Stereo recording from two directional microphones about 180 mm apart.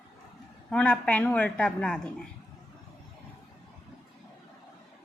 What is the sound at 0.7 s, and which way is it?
A woman's voice, 5° left (ahead or behind).